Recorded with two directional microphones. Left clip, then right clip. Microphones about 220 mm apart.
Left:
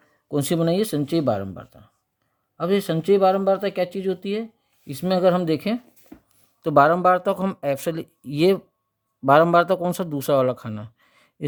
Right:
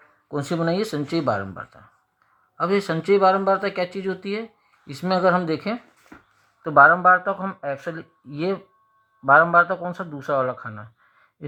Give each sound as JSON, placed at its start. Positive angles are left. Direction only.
{"t": 0.3, "sound": "speech", "side_deg": 45}